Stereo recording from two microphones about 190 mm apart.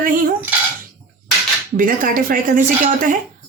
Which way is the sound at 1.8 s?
45° right (ahead or behind).